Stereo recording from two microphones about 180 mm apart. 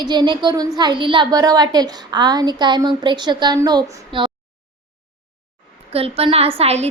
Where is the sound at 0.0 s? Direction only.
25° right (ahead or behind).